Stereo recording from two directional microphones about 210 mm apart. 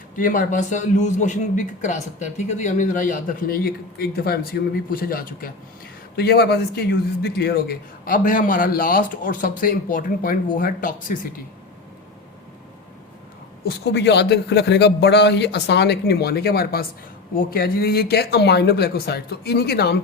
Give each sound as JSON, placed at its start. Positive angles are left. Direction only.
{"t": 0.2, "sound": "a man's voice", "side_deg": 40}
{"t": 13.7, "sound": "a man's voice", "side_deg": 50}